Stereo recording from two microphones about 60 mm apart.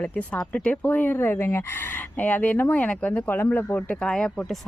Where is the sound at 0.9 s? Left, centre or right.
Left.